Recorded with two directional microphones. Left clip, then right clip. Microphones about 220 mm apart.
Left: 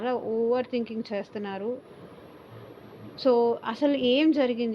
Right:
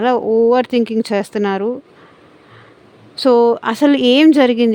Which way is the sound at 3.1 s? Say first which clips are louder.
Right 11 dB; 55° right (ahead or behind).